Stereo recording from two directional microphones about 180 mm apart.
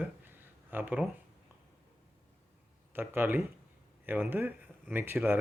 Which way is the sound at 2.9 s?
10° right (ahead or behind).